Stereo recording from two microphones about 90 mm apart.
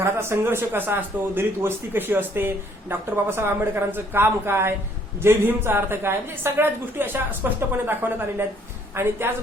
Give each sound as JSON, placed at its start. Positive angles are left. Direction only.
{"t": 0.0, "sound": "speech", "side_deg": -30}